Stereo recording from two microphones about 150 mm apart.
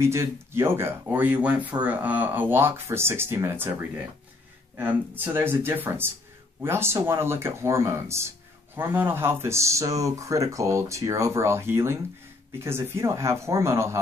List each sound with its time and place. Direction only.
0.0 s speech: 20° right (ahead or behind)
4.7 s speech: 15° right (ahead or behind)